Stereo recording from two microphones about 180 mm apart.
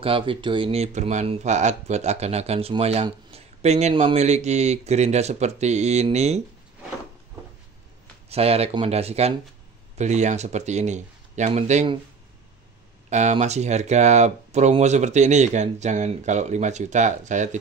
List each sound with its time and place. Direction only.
0.0 s speech: 30° right (ahead or behind)
8.3 s speech: 35° right (ahead or behind)
13.1 s speech: 40° right (ahead or behind)